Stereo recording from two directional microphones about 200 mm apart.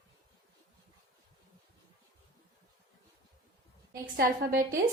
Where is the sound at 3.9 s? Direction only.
50° right (ahead or behind).